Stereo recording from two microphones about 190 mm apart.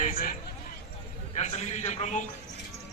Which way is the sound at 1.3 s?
35° left (ahead or behind).